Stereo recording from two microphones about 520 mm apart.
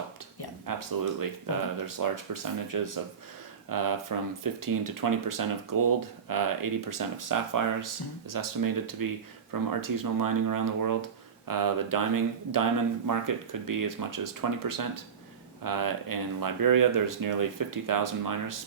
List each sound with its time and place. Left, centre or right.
0.6 s speech: right